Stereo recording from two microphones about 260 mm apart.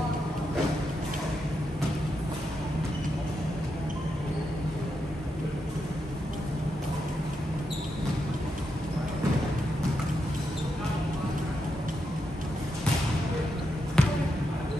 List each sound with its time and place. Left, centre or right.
14.0 s basketball bounce: centre